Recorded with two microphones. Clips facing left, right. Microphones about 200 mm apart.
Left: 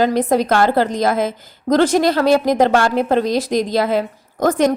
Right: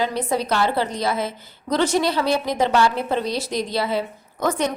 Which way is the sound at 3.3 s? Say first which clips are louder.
Left 7 dB; 90° left.